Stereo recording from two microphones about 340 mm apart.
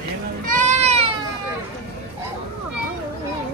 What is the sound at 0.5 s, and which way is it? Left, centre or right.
Goat, right.